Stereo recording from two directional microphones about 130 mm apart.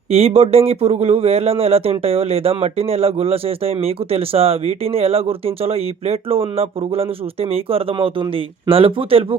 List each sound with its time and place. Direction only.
0.1 s speech: 50° right (ahead or behind)